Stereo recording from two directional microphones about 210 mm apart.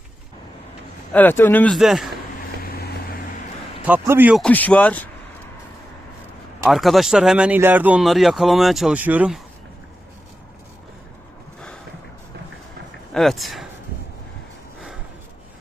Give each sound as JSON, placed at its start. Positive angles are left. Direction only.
{"t": 1.1, "sound": "a man's voice", "side_deg": 10}
{"t": 2.7, "sound": "vehicle", "side_deg": 45}
{"t": 3.8, "sound": "a man's voice", "side_deg": -10}
{"t": 4.4, "sound": "a man's voice", "side_deg": 5}
{"t": 6.7, "sound": "speech", "side_deg": 0}
{"t": 13.1, "sound": "speech", "side_deg": 0}